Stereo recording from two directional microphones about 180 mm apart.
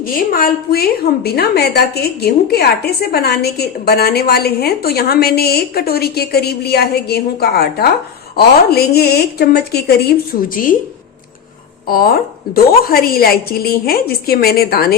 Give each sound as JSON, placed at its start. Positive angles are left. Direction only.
{"t": 0.0, "sound": "a woman's voice", "side_deg": 50}
{"t": 11.9, "sound": "a woman's voice", "side_deg": 55}